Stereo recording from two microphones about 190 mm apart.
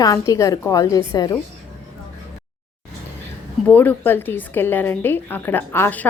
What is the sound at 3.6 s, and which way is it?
A woman's voice, 10° left (ahead or behind).